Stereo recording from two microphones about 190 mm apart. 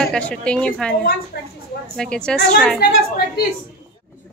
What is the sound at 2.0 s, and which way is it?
Speech, 5° left (ahead or behind).